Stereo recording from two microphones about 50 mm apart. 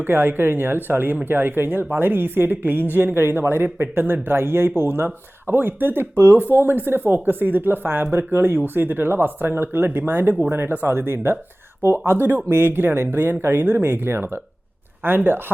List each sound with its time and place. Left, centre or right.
0.0 s speech: right